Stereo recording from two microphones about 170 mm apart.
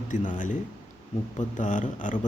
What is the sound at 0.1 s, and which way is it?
Speech, 50° left (ahead or behind).